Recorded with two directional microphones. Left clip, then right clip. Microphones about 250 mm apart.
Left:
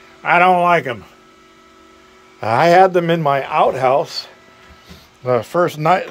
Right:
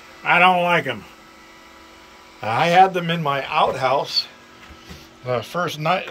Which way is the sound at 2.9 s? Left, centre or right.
Left.